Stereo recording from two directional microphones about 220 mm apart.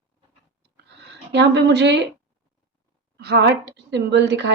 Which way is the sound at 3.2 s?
50° right (ahead or behind).